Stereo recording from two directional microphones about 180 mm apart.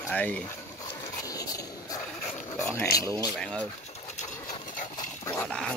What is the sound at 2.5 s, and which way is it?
Dog, 5° left (ahead or behind).